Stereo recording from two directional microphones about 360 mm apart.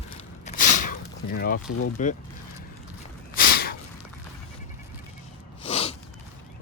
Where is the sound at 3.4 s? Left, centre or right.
Left.